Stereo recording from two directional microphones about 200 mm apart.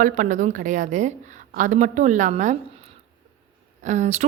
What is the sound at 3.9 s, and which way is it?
Speech, 35° right (ahead or behind).